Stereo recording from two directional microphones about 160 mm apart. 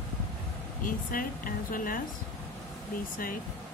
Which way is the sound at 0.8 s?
60° left (ahead or behind).